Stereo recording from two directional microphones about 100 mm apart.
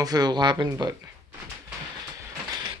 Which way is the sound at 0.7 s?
35° right (ahead or behind).